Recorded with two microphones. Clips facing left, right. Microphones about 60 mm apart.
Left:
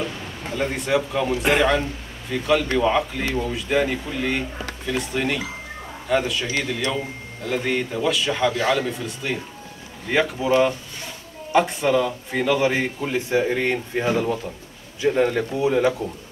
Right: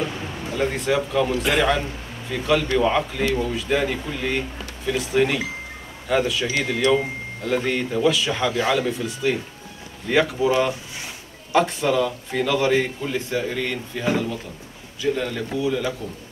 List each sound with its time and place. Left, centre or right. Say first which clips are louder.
0.6 s a man's voice: even; centre
7.4 s a man's voice: right 1 dB; centre; by 15.9 s left